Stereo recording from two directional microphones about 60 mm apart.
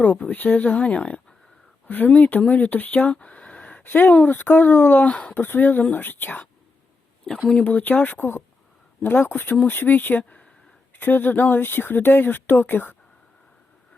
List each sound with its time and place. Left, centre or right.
0.0 s speech: left
7.3 s speech: centre
7.6 s speech: left
8.2 s speech: left
10.9 s speech: left